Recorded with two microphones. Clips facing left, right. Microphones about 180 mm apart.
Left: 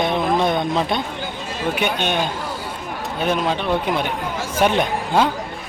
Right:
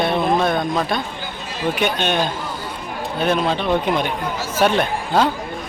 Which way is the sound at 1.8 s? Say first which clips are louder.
Right 2 dB; 10° left (ahead or behind).